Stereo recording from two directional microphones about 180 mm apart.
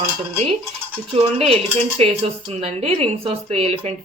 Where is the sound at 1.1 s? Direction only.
35° right (ahead or behind).